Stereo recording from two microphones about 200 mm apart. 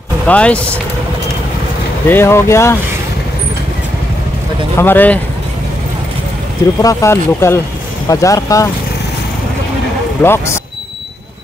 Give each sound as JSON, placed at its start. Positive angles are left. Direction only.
{"t": 0.3, "sound": "speech", "side_deg": 5}
{"t": 2.0, "sound": "speech", "side_deg": 10}
{"t": 4.7, "sound": "speech", "side_deg": 10}
{"t": 6.8, "sound": "speech", "side_deg": 15}
{"t": 10.2, "sound": "speech", "side_deg": 10}